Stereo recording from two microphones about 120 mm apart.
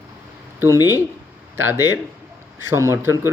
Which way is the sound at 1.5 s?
20° right (ahead or behind).